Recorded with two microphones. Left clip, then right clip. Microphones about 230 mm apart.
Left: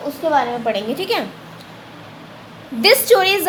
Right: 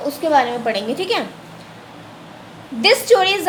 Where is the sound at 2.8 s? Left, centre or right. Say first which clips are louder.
Left 1 dB; centre.